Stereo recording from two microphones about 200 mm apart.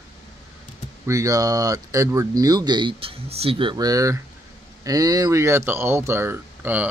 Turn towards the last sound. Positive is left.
turn(degrees=-10)  # may be behind; listen again after turning